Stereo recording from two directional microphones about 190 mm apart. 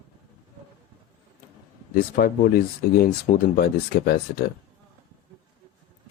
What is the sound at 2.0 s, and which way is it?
Speech, 50° left (ahead or behind).